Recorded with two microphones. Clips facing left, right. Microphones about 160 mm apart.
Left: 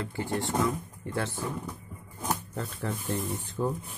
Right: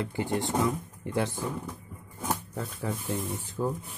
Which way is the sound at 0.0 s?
20° right (ahead or behind).